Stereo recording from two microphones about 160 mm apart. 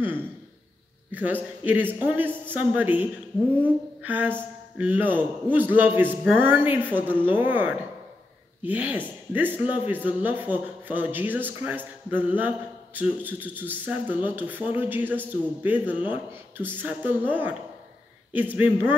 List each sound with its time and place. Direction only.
1.1 s speech: 10° right (ahead or behind)